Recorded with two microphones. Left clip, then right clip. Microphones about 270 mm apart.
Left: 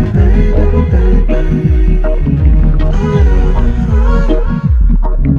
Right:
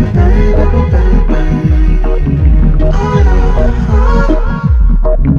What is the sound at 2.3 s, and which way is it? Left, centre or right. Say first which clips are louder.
Music: right 1 dB; centre.